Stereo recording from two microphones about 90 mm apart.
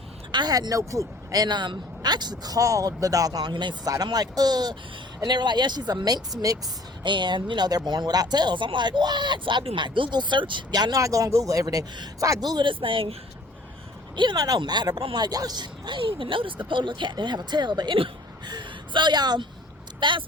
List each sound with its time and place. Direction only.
0.3 s speech: 50° right (ahead or behind)
3.5 s speech: 60° right (ahead or behind)
3.8 s speech: 45° right (ahead or behind)
7.0 s speech: 60° right (ahead or behind)
11.0 s speech: 40° right (ahead or behind)
12.5 s speech: 55° right (ahead or behind)
12.8 s speech: 85° right
14.2 s speech: 50° right (ahead or behind); by 18.1 s 70° right (ahead or behind)
18.4 s speech: 55° right (ahead or behind)
20.0 s speech: 60° right (ahead or behind)